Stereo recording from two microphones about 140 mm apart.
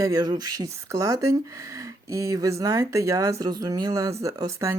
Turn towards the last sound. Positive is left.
turn(degrees=-25)  # may be behind; listen again after turning